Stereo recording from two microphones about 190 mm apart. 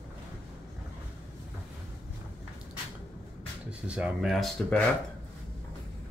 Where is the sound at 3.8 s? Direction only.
5° right (ahead or behind).